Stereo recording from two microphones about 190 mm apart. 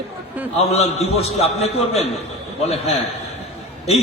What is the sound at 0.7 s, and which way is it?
A man's voice, 35° left (ahead or behind).